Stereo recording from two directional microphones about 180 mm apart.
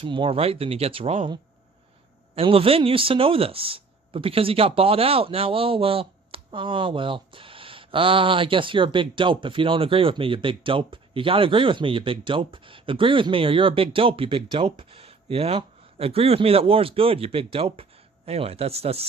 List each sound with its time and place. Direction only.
0.0 s speech: 30° right (ahead or behind)